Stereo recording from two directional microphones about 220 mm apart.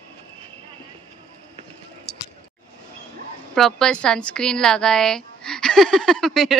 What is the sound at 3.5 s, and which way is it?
Speech, centre (ahead or behind).